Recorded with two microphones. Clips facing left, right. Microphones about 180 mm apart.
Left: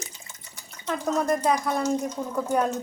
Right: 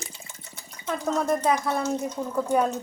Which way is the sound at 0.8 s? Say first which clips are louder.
Left 1 dB; 5° left (ahead or behind).